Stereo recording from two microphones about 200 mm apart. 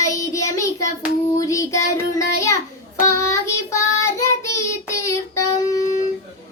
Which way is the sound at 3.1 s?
15° left (ahead or behind).